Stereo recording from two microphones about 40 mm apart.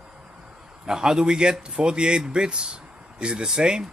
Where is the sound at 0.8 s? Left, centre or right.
Centre.